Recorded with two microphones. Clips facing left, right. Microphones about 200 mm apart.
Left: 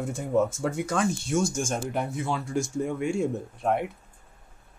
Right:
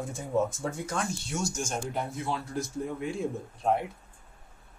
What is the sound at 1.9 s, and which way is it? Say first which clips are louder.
Speech: left 4 dB; 80° left.